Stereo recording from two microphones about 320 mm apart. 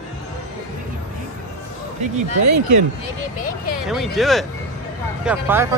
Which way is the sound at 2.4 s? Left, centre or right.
Right.